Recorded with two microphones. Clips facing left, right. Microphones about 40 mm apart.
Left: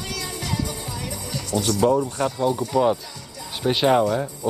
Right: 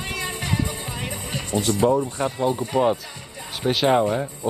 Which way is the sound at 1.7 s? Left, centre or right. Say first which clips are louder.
Even; right.